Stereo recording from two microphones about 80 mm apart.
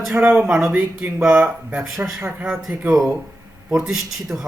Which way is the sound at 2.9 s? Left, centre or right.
Centre.